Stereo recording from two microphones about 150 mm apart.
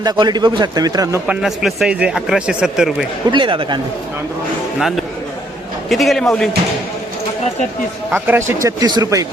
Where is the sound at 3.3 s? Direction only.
35° right (ahead or behind).